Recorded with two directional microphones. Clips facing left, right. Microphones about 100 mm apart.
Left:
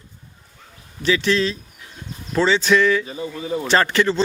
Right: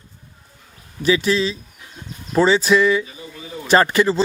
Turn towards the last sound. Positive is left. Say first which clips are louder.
# right 2 dB
turn(degrees=-10)  # may be behind; listen again after turning